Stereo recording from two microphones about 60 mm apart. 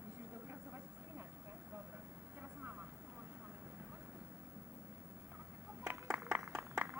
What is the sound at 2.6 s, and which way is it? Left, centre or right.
Vehicle, right.